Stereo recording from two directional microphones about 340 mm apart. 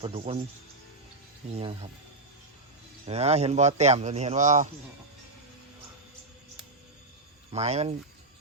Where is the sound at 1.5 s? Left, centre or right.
Centre.